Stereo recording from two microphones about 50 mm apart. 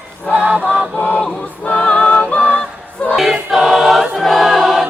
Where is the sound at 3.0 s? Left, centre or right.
Left.